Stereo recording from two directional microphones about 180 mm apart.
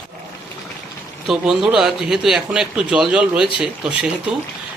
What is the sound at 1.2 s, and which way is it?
Speech, centre (ahead or behind).